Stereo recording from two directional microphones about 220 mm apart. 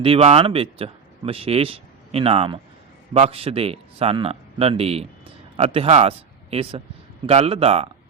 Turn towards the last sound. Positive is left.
turn(degrees=-25)  # may be behind; listen again after turning